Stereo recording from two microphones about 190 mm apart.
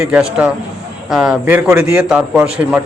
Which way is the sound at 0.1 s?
5° right (ahead or behind).